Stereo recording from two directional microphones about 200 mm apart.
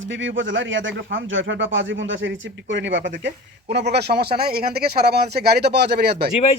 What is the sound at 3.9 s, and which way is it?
Speech, 55° right (ahead or behind).